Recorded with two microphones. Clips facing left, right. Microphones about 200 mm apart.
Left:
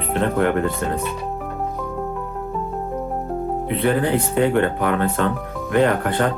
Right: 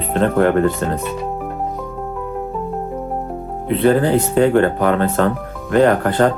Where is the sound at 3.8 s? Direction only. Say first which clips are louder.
Right 5 dB; 35° right (ahead or behind).